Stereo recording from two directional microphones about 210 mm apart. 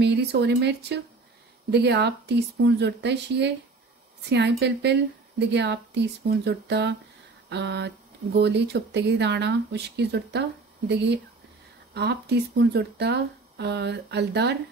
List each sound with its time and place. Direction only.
0.0 s speech: 50° right (ahead or behind)
7.4 s a sound: 55° right (ahead or behind)
8.4 s speech: 55° right (ahead or behind)